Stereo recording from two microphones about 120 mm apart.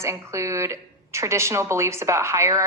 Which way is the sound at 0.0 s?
25° right (ahead or behind).